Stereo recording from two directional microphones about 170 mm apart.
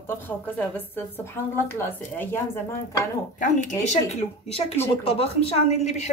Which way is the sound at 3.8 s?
40° left (ahead or behind).